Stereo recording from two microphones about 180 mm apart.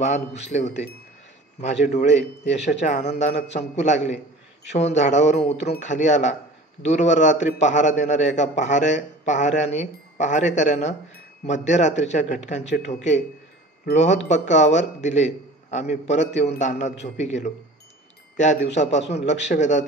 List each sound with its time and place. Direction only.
0.0 s a man's voice: 40° left (ahead or behind)